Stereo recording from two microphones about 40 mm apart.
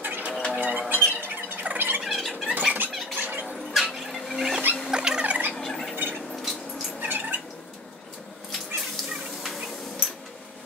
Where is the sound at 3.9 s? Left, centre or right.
Centre.